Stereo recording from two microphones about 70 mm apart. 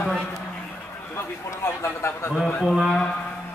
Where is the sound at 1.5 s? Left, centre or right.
Left.